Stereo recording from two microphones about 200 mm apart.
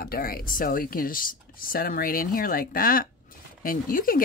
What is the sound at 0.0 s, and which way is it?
Speech, 50° left (ahead or behind).